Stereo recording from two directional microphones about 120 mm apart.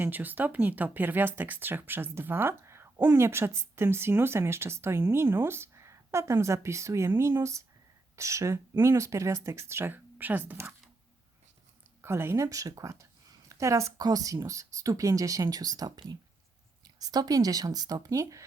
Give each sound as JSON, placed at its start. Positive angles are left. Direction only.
{"t": 0.0, "sound": "speech", "side_deg": -15}
{"t": 12.0, "sound": "speech", "side_deg": -20}